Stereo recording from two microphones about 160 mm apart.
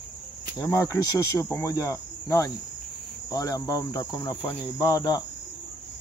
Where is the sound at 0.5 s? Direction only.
20° left (ahead or behind).